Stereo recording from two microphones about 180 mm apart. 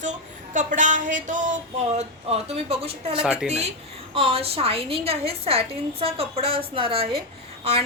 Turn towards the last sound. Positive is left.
turn(degrees=-35)  # may be behind; listen again after turning